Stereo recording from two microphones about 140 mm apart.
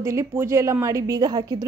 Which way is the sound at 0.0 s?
20° right (ahead or behind).